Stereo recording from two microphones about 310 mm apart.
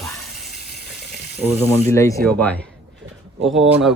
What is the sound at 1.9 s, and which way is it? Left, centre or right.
Speech, centre.